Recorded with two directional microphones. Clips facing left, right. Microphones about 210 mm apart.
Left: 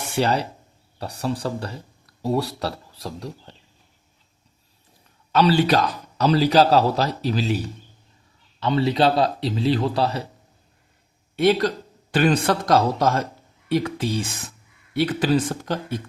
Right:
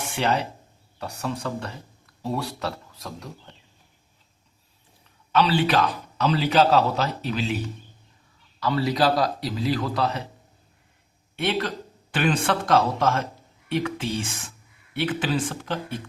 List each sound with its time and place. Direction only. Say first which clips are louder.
0.0 s speech: left 3 dB; 35° left (ahead or behind)
5.3 s a man's voice: left 3 dB; 40° left (ahead or behind)
8.6 s a man's voice: left 3 dB; 25° left (ahead or behind)
11.3 s a man's voice: left 7 dB; 35° left (ahead or behind)